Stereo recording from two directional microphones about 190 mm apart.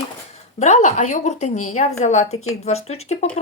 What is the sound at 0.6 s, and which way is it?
A woman's voice, 35° left (ahead or behind).